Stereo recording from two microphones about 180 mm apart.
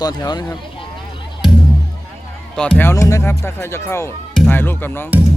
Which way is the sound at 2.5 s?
5° left (ahead or behind).